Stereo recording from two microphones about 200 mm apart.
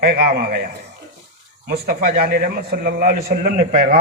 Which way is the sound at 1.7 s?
50° right (ahead or behind).